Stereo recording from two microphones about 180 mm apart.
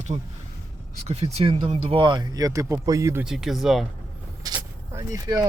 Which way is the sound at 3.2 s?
Centre (ahead or behind).